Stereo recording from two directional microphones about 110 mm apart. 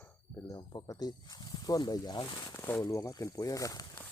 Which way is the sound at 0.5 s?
40° left (ahead or behind).